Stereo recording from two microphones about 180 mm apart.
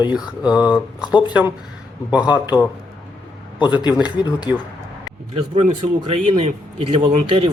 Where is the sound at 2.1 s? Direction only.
5° right (ahead or behind).